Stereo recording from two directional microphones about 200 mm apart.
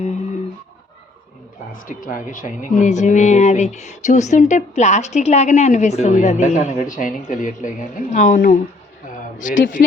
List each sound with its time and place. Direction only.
2.0 s speech: 40° left (ahead or behind)